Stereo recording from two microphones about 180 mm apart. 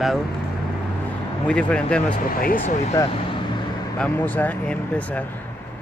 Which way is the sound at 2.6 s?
40° left (ahead or behind).